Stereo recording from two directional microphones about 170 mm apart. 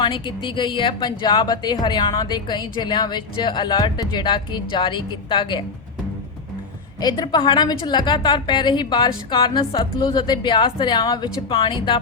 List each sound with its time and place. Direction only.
0.0 s a woman's voice: 30° left (ahead or behind)
7.0 s a woman's voice: 25° left (ahead or behind)